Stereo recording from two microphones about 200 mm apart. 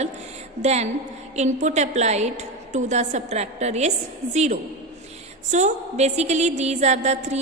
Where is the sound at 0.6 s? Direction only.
35° right (ahead or behind).